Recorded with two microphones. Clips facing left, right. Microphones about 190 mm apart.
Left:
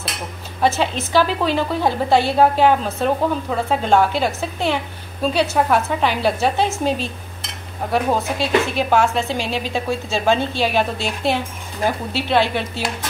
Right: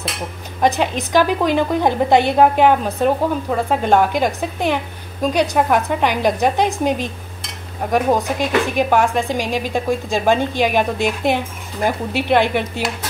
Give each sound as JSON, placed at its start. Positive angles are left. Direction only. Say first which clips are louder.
{"t": 0.6, "sound": "a woman's voice", "louder": "right 2 dB", "side_deg": -15}